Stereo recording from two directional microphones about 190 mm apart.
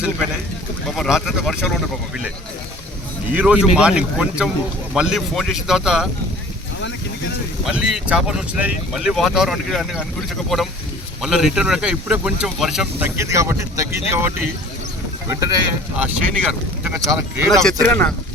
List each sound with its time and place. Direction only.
0.9 s speech: centre (ahead or behind)
3.3 s speech: 5° right (ahead or behind)
7.6 s speech: 5° right (ahead or behind)
11.2 s speech: centre (ahead or behind); by 15.5 s 20° right (ahead or behind)
16.0 s speech: 10° right (ahead or behind); by 18.1 s 10° left (ahead or behind)